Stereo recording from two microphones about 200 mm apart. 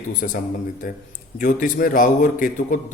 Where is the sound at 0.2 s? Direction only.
45° left (ahead or behind).